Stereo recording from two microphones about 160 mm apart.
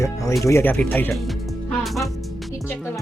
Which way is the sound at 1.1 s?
Centre (ahead or behind).